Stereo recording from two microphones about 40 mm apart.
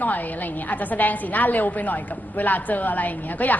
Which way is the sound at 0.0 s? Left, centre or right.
Left.